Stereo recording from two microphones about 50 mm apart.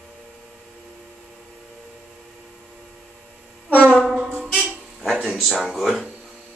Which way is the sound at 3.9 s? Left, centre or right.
Centre.